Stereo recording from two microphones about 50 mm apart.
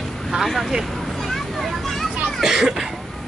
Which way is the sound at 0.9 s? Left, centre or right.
Centre.